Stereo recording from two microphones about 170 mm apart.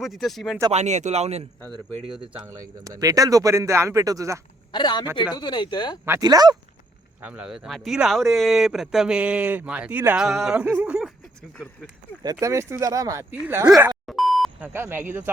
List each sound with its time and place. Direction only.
0.0 s speech: centre (ahead or behind)
0.7 s a man's voice: 40° right (ahead or behind)
2.5 s speech: 20° right (ahead or behind)
4.7 s speech: 25° left (ahead or behind)
6.1 s speech: 20° right (ahead or behind)
7.2 s speech: 10° right (ahead or behind)
12.2 s speech: 20° right (ahead or behind)
13.9 s beep: centre (ahead or behind)
14.7 s speech: 15° right (ahead or behind)